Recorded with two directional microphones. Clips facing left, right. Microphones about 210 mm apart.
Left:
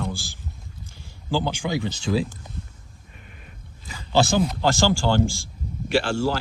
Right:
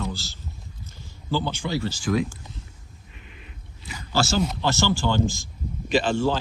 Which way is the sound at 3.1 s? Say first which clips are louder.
Even; 45° left (ahead or behind).